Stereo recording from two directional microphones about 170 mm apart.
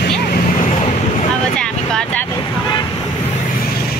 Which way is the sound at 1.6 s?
5° left (ahead or behind).